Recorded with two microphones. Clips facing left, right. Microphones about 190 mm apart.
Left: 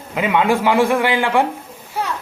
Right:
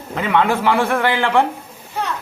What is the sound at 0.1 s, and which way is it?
A man's voice, 10° left (ahead or behind).